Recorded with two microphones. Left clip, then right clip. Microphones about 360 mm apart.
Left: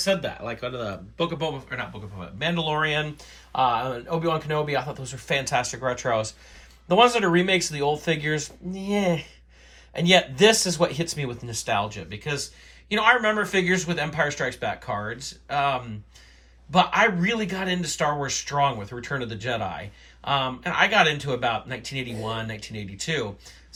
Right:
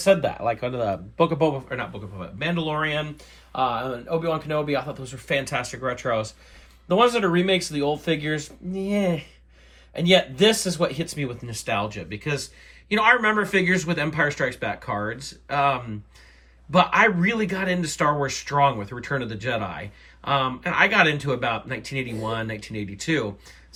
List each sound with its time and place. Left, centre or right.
0.0 s speech: centre
1.7 s speech: centre